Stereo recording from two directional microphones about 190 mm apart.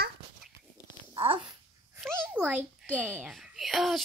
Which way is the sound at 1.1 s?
25° right (ahead or behind).